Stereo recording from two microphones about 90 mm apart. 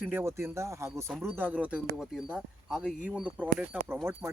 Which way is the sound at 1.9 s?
5° right (ahead or behind).